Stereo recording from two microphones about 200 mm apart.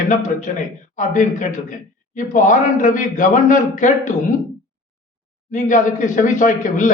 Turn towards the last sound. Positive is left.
turn(degrees=40)  # may be behind; listen again after turning